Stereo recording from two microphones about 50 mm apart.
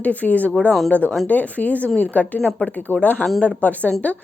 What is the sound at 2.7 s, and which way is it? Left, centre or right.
A woman's voice, left.